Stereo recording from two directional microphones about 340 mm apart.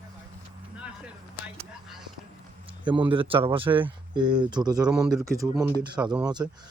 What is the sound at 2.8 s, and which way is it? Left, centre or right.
Speech, centre.